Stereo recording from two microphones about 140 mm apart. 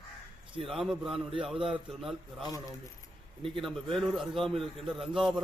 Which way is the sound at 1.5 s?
40° right (ahead or behind).